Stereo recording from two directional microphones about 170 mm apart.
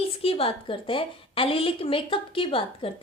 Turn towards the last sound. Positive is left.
turn(degrees=30)  # may be behind; listen again after turning